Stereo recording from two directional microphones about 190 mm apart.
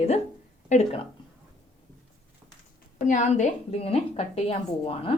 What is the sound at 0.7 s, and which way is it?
Speech, 35° left (ahead or behind).